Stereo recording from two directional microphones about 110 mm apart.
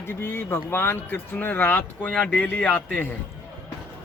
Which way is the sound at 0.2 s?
20° left (ahead or behind).